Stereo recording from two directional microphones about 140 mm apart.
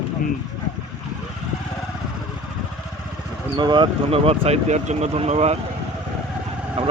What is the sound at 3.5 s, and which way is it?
Speech, 30° right (ahead or behind).